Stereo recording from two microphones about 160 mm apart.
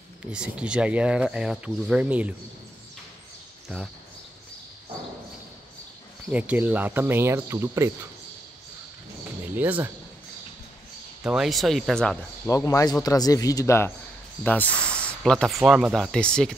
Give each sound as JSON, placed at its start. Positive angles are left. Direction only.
{"t": 0.3, "sound": "speech", "side_deg": -5}
{"t": 3.6, "sound": "speech", "side_deg": 0}
{"t": 6.3, "sound": "speech", "side_deg": -10}
{"t": 9.6, "sound": "speech", "side_deg": -10}
{"t": 11.2, "sound": "speech", "side_deg": 0}
{"t": 12.4, "sound": "speech", "side_deg": 20}